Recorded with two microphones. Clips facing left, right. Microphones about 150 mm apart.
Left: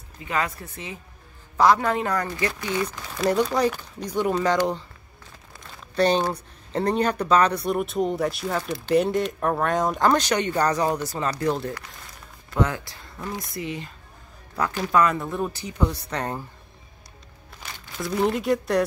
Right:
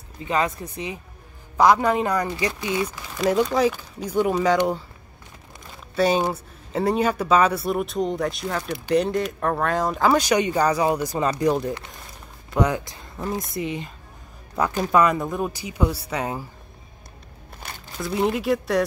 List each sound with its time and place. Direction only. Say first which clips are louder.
0.3 s speech: right 4 dB; 20° right (ahead or behind)
5.9 s speech: right 1 dB; 10° right (ahead or behind)
13.3 s speech: right 5 dB; 50° right (ahead or behind)
13.6 s speech: right 3 dB; 20° right (ahead or behind)
17.6 s a sound: right 2 dB; 55° right (ahead or behind)
17.9 s speech: even; centre (ahead or behind)